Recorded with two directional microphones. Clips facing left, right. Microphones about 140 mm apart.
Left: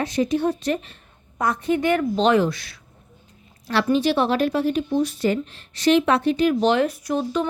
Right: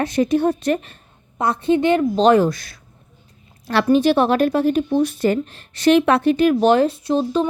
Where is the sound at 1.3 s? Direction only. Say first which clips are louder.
Right 4 dB; 30° right (ahead or behind).